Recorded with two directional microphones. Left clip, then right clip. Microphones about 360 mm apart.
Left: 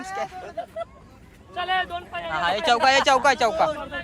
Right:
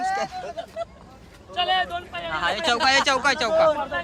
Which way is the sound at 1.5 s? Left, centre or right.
Centre.